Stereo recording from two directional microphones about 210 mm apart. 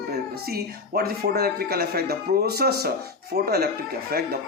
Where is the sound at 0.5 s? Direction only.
45° right (ahead or behind).